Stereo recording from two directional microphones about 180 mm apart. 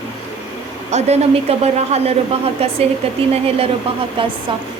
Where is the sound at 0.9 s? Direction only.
40° right (ahead or behind).